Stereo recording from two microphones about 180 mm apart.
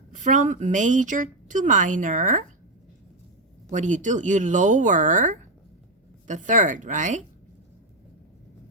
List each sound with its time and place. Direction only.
0.1 s speech: 45° right (ahead or behind)
3.7 s speech: 45° right (ahead or behind)